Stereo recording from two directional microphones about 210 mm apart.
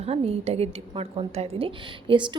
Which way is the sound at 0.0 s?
30° right (ahead or behind).